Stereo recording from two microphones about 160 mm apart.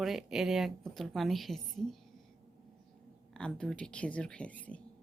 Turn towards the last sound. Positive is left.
turn(degrees=10)  # may be behind; listen again after turning